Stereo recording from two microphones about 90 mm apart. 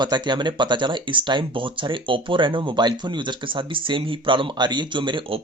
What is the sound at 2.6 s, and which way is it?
Speech, 55° right (ahead or behind).